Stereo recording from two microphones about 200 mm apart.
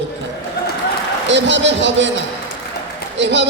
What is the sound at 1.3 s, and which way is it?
Speech, 65° right (ahead or behind).